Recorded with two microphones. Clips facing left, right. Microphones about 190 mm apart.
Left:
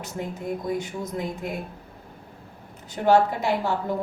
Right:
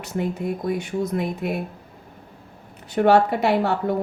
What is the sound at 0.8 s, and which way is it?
Speech, 65° right (ahead or behind).